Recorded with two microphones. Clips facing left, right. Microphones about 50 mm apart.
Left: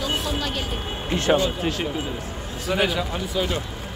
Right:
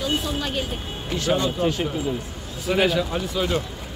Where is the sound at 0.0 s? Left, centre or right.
Centre.